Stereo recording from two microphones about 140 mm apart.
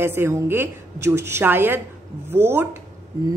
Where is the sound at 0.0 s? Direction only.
15° right (ahead or behind).